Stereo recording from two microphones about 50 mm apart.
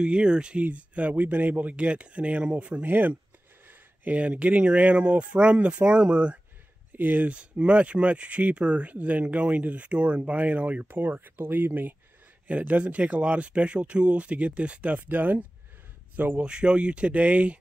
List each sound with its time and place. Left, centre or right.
0.0 s speech: centre
2.8 s speech: right
3.6 s a sound: right
4.2 s speech: right
7.0 s speech: right
7.2 s speech: right
10.9 s speech: right
12.4 s speech: right
16.3 s speech: centre